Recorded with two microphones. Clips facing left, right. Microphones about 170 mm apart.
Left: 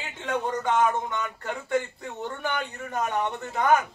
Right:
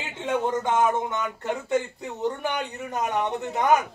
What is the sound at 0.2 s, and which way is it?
A man's voice, 25° right (ahead or behind).